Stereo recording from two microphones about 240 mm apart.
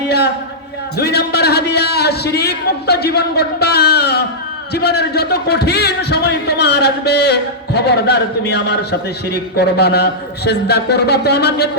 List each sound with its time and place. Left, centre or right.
0.9 s speech: left